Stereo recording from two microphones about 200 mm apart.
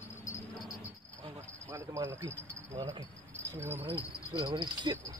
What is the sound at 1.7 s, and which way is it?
Speech, 15° right (ahead or behind).